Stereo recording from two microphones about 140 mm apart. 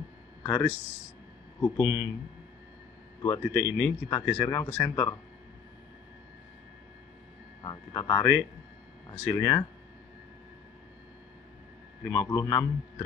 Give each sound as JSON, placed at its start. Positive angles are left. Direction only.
{"t": 0.4, "sound": "a sound", "side_deg": 25}
{"t": 1.6, "sound": "speech", "side_deg": 25}
{"t": 3.2, "sound": "speech", "side_deg": 25}
{"t": 7.6, "sound": "speech", "side_deg": 25}
{"t": 12.1, "sound": "speech", "side_deg": 25}